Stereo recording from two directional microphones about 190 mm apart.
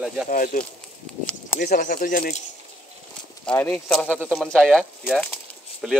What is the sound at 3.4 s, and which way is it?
Speech, 5° left (ahead or behind).